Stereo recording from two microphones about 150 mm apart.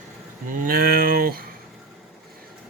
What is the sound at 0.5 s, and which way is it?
Cattle, 70° right (ahead or behind).